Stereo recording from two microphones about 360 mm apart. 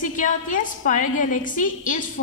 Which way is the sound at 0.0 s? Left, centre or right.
Left.